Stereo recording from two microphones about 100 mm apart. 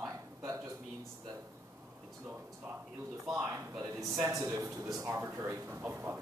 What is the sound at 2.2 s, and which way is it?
A man's voice, 20° right (ahead or behind).